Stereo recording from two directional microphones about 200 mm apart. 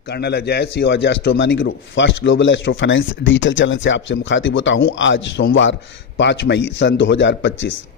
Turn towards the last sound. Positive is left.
turn(degrees=70)  # may be behind; listen again after turning